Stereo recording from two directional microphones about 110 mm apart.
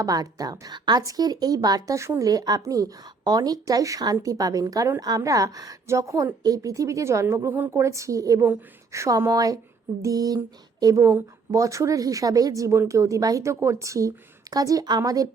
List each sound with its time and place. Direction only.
0.0 s speech: 35° right (ahead or behind)